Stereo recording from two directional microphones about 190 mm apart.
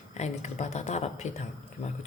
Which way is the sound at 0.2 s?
35° left (ahead or behind).